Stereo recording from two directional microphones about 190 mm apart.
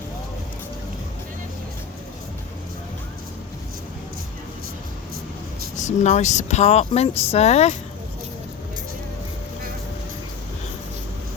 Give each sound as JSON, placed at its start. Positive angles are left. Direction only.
{"t": 5.7, "sound": "speech", "side_deg": 40}